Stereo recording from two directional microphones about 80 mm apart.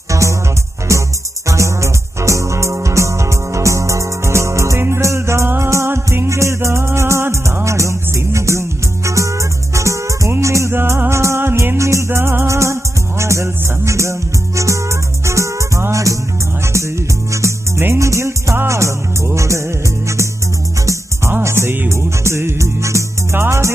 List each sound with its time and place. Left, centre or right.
0.1 s music: right
1.5 s music: right
17.3 s music: right
21.3 s music: right